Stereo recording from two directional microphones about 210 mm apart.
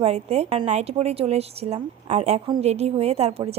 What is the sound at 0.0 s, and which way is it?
A woman's voice, 30° right (ahead or behind).